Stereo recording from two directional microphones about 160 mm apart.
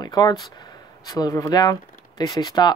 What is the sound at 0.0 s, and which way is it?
Speech, 25° left (ahead or behind).